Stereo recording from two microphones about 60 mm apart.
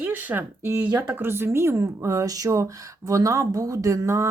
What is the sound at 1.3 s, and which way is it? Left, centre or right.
Speech, right.